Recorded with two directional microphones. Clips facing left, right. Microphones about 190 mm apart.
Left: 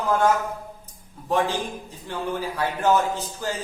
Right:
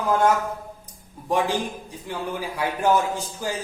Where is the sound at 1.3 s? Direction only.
15° right (ahead or behind).